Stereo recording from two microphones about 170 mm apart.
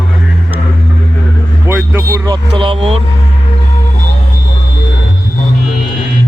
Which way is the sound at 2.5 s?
30° right (ahead or behind).